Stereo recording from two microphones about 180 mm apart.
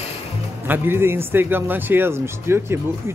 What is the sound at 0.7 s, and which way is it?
Speech, 10° right (ahead or behind).